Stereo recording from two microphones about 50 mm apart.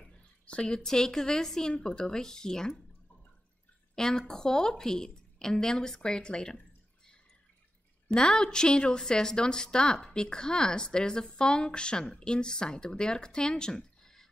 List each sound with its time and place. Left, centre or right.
0.0 s a woman's voice: left
3.9 s a woman's voice: centre
8.1 s a woman's voice: centre